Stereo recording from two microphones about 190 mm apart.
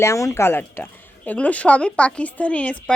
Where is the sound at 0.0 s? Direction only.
15° left (ahead or behind).